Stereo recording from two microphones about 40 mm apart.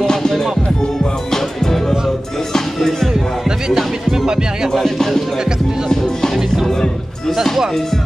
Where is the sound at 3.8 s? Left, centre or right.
Centre.